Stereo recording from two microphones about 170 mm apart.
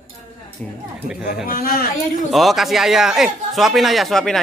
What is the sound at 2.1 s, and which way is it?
Speech, centre (ahead or behind).